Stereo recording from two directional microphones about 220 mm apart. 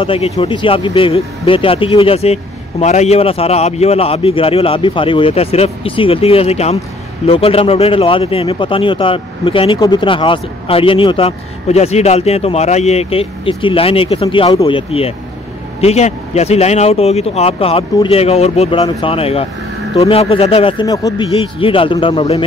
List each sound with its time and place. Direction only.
0.0 s speech: 25° left (ahead or behind)